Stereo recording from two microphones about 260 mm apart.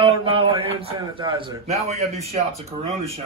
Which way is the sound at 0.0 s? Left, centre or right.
Right.